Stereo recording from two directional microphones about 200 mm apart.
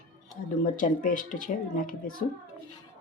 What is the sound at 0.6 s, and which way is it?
A woman's voice, 40° left (ahead or behind).